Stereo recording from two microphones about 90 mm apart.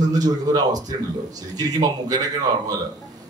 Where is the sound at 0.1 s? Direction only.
45° right (ahead or behind).